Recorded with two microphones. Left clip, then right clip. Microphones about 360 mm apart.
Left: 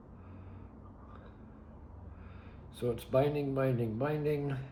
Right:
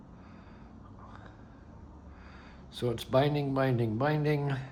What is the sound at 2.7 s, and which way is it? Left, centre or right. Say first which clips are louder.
Speech: right 3 dB; centre.